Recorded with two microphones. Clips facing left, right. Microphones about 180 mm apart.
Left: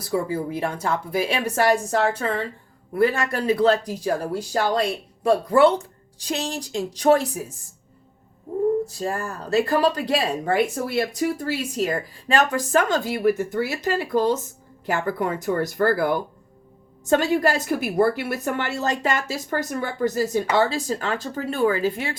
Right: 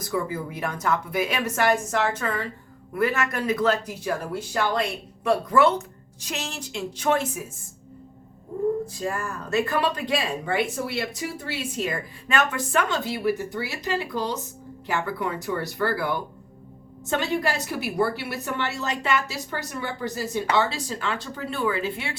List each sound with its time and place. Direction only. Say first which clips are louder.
0.0 s speech: left 4 dB; 30° left (ahead or behind)
8.9 s a woman's voice: left 2 dB; 35° left (ahead or behind)